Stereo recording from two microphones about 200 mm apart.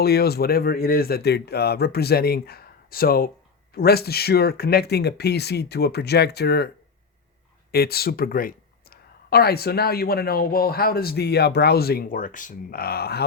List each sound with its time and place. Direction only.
0.0 s speech: 50° left (ahead or behind)
7.7 s speech: 50° left (ahead or behind)